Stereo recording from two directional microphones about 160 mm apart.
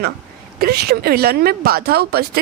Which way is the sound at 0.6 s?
75° right (ahead or behind).